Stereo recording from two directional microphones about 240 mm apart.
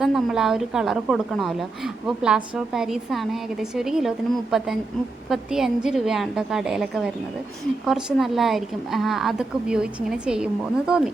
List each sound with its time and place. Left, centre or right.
0.0 s a woman's voice: centre